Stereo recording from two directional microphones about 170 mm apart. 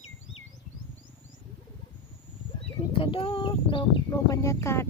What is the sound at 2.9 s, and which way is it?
Speech, 30° left (ahead or behind).